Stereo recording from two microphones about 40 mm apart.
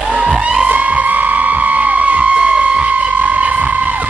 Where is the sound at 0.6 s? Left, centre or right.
Right.